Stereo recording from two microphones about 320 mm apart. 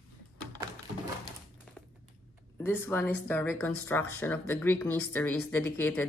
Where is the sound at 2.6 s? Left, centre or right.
Centre.